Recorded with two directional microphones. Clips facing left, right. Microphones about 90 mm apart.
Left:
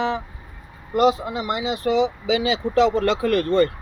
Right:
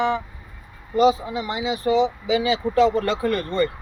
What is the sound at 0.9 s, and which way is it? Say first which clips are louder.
Speech: even; 70° left (ahead or behind).